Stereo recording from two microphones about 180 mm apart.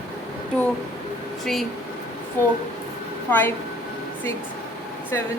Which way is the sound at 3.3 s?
10° left (ahead or behind).